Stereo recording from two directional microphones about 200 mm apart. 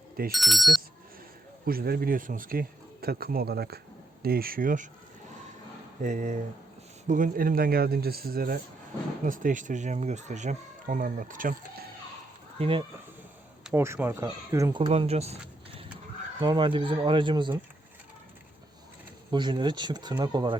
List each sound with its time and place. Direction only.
0.3 s speech: centre (ahead or behind)
1.6 s speech: 50° right (ahead or behind)
6.0 s speech: 40° right (ahead or behind)
12.5 s speech: 25° right (ahead or behind)
13.7 s speech: 15° right (ahead or behind)
14.8 s speech: 30° right (ahead or behind)
19.3 s speech: 25° right (ahead or behind)